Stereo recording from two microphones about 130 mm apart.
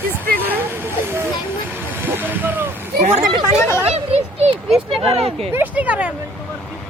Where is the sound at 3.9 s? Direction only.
55° right (ahead or behind).